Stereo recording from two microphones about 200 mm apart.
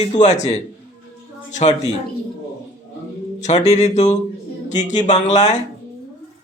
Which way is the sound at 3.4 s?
35° left (ahead or behind).